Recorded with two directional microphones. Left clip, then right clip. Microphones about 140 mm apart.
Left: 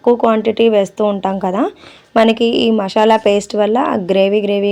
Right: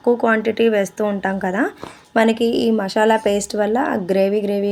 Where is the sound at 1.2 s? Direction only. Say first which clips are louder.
Left 4 dB; 20° right (ahead or behind).